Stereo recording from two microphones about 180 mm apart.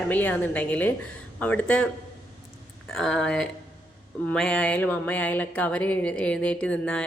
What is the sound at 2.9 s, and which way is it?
Speech, 5° left (ahead or behind).